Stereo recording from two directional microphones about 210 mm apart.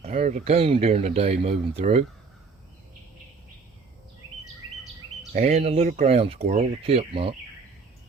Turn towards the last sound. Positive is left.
turn(degrees=-25)  # may be behind; listen again after turning